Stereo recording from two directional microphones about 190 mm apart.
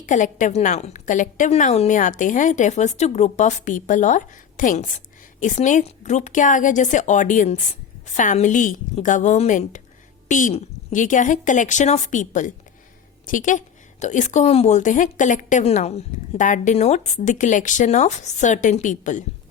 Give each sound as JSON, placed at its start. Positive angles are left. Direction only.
{"t": 0.0, "sound": "a woman's voice", "side_deg": 40}